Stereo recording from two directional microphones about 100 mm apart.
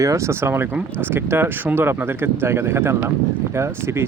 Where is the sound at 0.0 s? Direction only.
30° right (ahead or behind).